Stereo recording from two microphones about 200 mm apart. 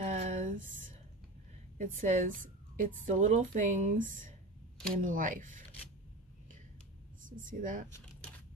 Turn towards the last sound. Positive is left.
turn(degrees=-40)  # may be behind; listen again after turning